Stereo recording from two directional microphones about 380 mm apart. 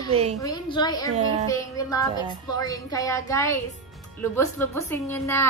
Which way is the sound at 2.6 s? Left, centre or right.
Centre.